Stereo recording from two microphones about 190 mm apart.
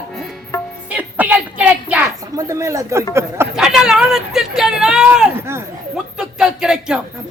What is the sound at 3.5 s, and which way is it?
Speech, 5° right (ahead or behind).